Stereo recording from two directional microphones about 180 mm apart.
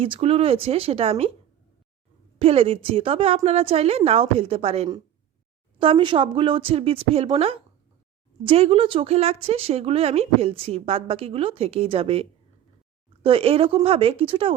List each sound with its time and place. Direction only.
0.0 s speech: 35° right (ahead or behind)
2.4 s speech: 35° right (ahead or behind)